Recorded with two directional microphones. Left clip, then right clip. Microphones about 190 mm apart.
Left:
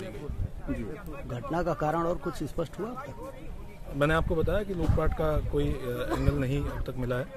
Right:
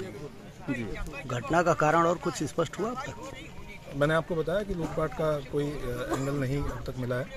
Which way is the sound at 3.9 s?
25° left (ahead or behind).